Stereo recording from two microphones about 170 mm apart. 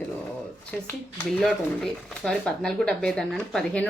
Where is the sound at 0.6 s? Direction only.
10° left (ahead or behind).